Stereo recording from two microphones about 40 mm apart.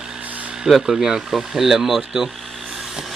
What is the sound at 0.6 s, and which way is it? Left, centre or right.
Speech, centre.